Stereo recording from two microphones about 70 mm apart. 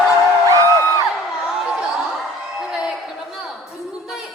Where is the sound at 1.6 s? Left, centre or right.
Centre.